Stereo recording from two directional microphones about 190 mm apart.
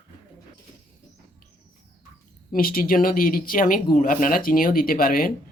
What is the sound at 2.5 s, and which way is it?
Speech, 50° left (ahead or behind).